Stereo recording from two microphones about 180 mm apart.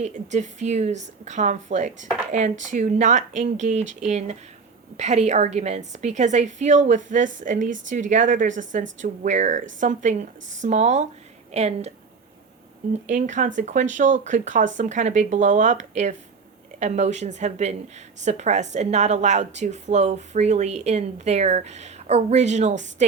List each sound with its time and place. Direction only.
0.0 s a woman's voice: 40° right (ahead or behind)